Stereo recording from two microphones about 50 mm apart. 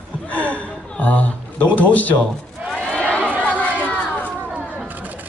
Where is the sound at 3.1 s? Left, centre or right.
Right.